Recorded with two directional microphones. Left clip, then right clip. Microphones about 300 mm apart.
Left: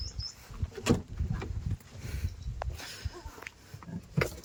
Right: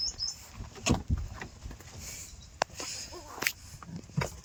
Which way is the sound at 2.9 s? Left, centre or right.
Centre.